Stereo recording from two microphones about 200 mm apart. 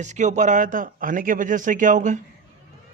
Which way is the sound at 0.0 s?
35° right (ahead or behind).